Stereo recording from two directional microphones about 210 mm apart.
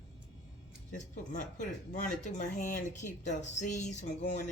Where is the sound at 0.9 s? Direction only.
35° left (ahead or behind).